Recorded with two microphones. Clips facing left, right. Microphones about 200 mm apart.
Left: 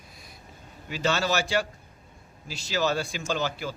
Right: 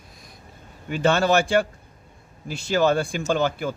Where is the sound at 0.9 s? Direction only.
55° right (ahead or behind).